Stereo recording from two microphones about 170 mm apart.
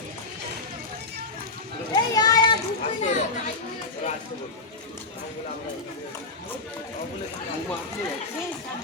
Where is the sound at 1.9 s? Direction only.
25° left (ahead or behind).